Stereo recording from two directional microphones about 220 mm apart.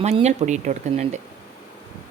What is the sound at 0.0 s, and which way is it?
A woman's voice, 30° right (ahead or behind).